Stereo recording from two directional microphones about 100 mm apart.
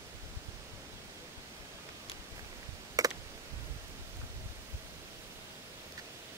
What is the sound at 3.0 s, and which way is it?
Computer keyboard, 35° right (ahead or behind).